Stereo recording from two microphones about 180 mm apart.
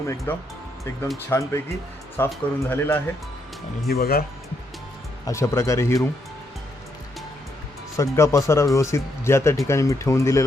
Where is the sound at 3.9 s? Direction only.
55° left (ahead or behind).